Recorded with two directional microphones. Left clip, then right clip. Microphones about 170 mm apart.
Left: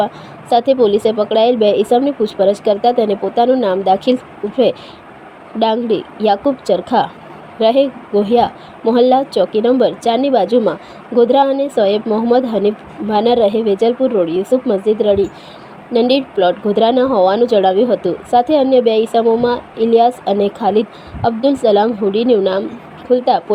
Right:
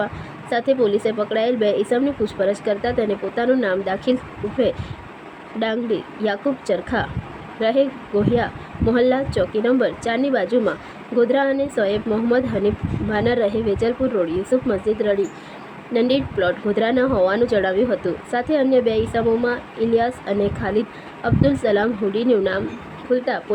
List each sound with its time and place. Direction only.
0.5 s a woman's voice: 15° left (ahead or behind)